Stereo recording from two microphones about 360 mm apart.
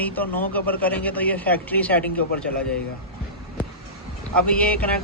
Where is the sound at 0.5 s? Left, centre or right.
Centre.